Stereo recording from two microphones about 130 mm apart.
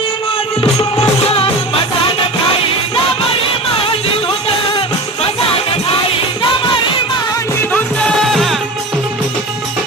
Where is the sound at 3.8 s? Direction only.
45° left (ahead or behind); by 7.7 s 25° left (ahead or behind).